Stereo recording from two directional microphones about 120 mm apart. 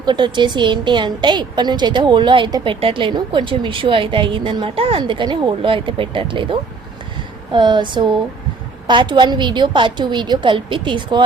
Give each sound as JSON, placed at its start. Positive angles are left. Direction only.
{"t": 0.0, "sound": "a woman's voice", "side_deg": -40}